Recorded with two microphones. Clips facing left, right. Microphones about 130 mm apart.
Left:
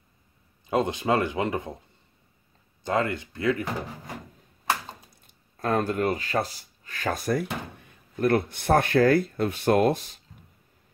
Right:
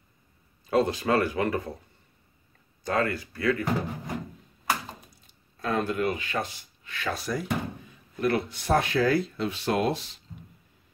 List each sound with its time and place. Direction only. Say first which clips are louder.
0.7 s speech: even; 20° left (ahead or behind)
2.8 s speech: left 1 dB; 25° left (ahead or behind)
5.2 s speech: left 3 dB; 45° left (ahead or behind)